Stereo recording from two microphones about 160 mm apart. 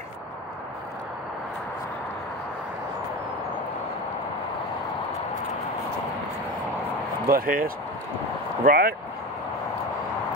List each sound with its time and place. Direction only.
7.2 s speech: 65° right (ahead or behind)